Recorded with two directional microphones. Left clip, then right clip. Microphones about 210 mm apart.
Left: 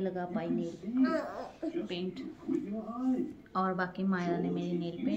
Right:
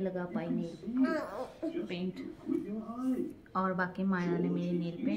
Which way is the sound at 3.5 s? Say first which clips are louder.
Even; 5° right (ahead or behind).